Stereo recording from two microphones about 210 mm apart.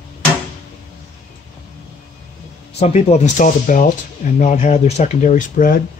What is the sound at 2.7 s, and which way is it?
Speech, 30° left (ahead or behind).